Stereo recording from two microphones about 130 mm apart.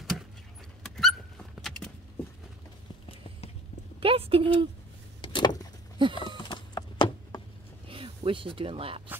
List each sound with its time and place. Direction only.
0.8 s dog: centre (ahead or behind)
4.0 s speech: 45° right (ahead or behind)
5.2 s vehicle: 35° left (ahead or behind)
6.0 s a sound: 40° right (ahead or behind)
6.3 s a sound: 35° left (ahead or behind)
7.9 s speech: 45° right (ahead or behind)